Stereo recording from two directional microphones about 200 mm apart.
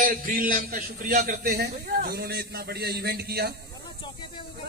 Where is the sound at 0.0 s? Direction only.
45° right (ahead or behind).